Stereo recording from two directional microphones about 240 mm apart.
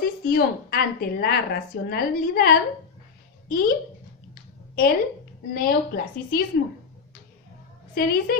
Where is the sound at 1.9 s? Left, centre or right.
Left.